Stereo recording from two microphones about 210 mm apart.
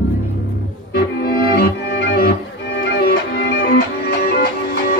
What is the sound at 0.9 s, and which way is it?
Music, 50° left (ahead or behind).